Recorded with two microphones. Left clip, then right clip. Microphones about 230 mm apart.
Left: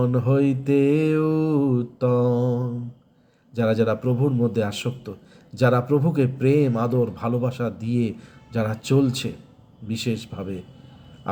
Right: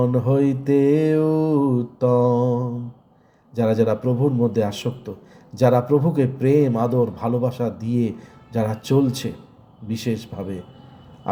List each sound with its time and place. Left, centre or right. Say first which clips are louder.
0.0 s mantra: right 2 dB; centre
3.5 s mantra: right 2 dB; centre